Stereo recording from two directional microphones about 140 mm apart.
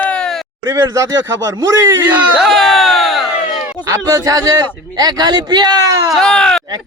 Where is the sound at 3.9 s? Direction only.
25° right (ahead or behind).